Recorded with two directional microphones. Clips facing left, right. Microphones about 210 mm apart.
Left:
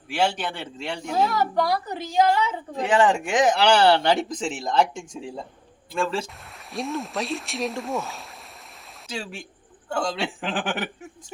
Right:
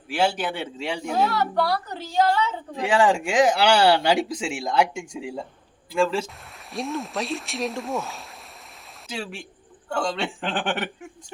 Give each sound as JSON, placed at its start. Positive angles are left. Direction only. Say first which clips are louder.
{"t": 0.1, "sound": "a man's voice", "louder": "right 1 dB", "side_deg": -5}
{"t": 1.1, "sound": "a woman's voice", "louder": "left 1 dB", "side_deg": 10}
{"t": 2.7, "sound": "a man's voice", "louder": "even", "side_deg": -10}